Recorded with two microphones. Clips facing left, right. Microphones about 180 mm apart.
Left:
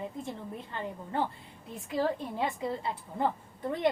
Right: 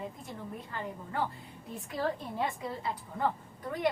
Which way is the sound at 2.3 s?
25° left (ahead or behind).